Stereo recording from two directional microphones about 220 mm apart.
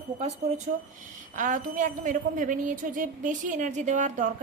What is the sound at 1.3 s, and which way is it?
A woman's voice, 35° right (ahead or behind).